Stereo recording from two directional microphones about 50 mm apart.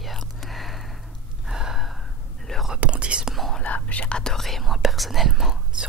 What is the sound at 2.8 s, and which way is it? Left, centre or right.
Whispering, right.